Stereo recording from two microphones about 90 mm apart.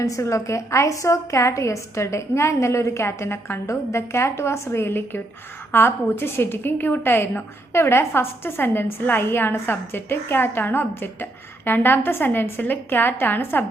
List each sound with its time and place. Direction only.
0.0 s a woman's voice: 35° left (ahead or behind)